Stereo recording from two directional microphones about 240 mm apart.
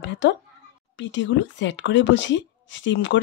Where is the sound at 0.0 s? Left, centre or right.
Left.